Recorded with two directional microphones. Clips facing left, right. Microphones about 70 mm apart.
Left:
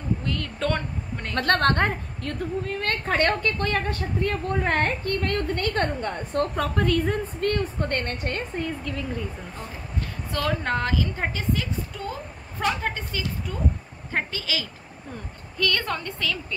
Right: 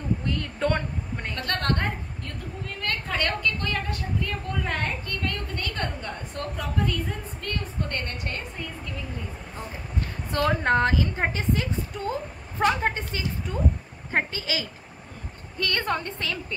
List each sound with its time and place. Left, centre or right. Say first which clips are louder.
0.2 s a sound: right 1 dB; right
1.3 s a woman's voice: left 7 dB; left
2.8 s a woman's voice: left 4 dB; left
10.3 s a woman's voice: right 3 dB; right